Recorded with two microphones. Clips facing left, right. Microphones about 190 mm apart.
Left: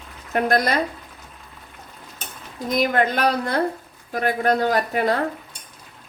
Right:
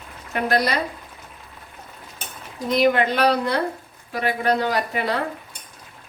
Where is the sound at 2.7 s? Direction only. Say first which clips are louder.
Right 2 dB; 45° left (ahead or behind).